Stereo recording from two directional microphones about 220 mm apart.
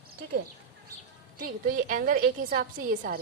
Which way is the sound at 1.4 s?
40° right (ahead or behind).